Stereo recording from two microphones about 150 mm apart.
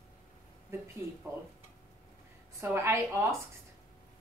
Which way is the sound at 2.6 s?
15° right (ahead or behind).